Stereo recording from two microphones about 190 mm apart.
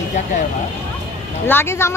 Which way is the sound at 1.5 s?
10° left (ahead or behind).